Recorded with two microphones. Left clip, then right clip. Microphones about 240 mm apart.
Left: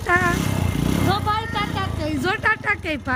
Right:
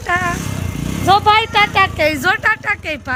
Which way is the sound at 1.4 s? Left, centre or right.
Centre.